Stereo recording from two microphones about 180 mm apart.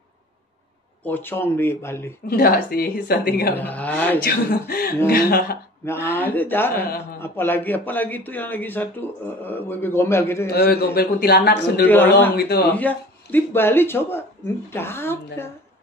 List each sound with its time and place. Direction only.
1.0 s speech: 10° left (ahead or behind)
2.2 s speech: 55° left (ahead or behind)
3.5 s speech: 10° left (ahead or behind)
4.2 s speech: 60° left (ahead or behind)
6.1 s speech: 10° left (ahead or behind)
10.4 s speech: 60° left (ahead or behind)
12.7 s speech: 10° left (ahead or behind)